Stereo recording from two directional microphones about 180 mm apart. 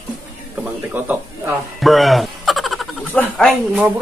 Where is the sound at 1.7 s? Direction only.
Centre (ahead or behind).